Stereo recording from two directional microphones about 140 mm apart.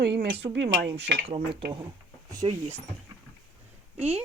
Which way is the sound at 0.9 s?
40° right (ahead or behind).